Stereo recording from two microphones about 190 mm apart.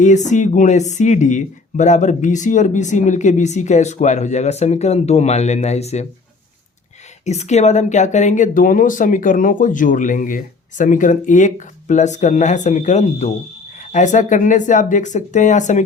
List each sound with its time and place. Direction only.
0.0 s speech: 40° left (ahead or behind)
7.3 s speech: 35° left (ahead or behind)